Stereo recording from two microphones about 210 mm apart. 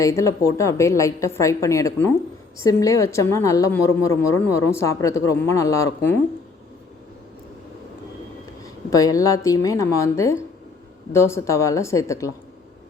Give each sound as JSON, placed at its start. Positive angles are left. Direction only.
{"t": 0.0, "sound": "a woman's voice", "side_deg": 15}
{"t": 8.6, "sound": "a woman's voice", "side_deg": 15}